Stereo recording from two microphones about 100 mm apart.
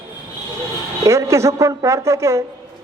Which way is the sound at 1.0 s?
30° right (ahead or behind).